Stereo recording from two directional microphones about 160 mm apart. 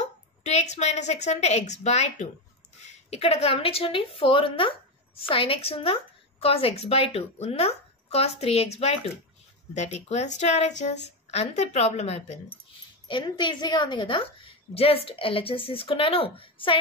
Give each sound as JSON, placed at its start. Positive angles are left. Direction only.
{"t": 0.4, "sound": "a woman's voice", "side_deg": 45}
{"t": 13.1, "sound": "a woman's voice", "side_deg": 30}